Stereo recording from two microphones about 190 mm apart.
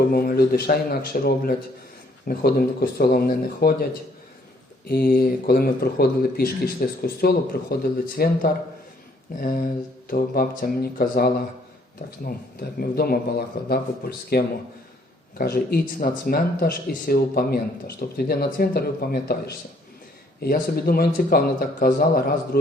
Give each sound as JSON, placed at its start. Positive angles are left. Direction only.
{"t": 0.1, "sound": "speech", "side_deg": 50}
{"t": 4.9, "sound": "speech", "side_deg": 50}